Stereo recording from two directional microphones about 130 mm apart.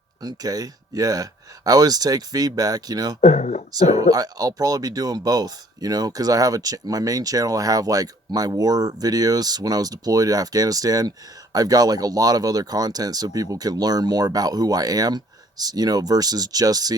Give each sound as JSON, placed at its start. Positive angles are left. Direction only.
{"t": 0.2, "sound": "speech", "side_deg": -30}
{"t": 3.2, "sound": "speech", "side_deg": 70}
{"t": 3.7, "sound": "speech", "side_deg": -30}